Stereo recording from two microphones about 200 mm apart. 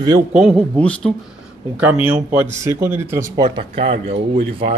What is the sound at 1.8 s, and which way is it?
Speech, 5° right (ahead or behind).